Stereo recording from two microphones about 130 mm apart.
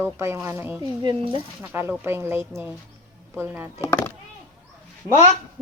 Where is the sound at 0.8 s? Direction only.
35° right (ahead or behind).